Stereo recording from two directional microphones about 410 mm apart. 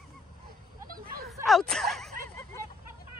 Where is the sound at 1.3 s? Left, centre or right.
Centre.